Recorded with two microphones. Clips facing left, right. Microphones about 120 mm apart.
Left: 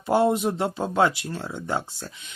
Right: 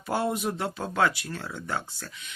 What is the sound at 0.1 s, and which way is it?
Speech, 25° left (ahead or behind).